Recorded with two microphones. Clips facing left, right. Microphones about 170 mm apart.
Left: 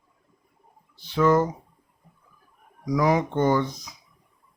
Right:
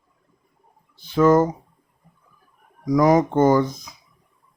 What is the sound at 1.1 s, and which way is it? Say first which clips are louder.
Speech: right 4 dB; 45° right (ahead or behind).